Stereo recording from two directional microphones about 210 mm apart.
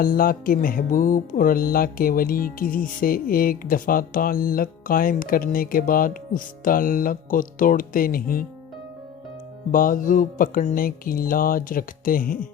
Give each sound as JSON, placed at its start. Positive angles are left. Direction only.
{"t": 0.0, "sound": "music", "side_deg": 45}
{"t": 9.7, "sound": "music", "side_deg": 40}